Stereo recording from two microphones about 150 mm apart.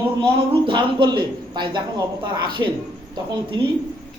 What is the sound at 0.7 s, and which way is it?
A woman's voice, 30° right (ahead or behind).